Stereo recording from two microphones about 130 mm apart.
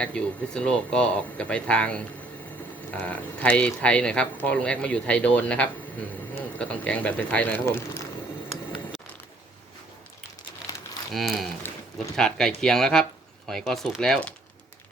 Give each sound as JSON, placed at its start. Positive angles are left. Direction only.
{"t": 0.0, "sound": "speech", "side_deg": 10}
{"t": 3.4, "sound": "speech", "side_deg": 10}
{"t": 11.1, "sound": "speech", "side_deg": 0}
{"t": 11.6, "sound": "a sound", "side_deg": 15}
{"t": 12.1, "sound": "speech", "side_deg": 5}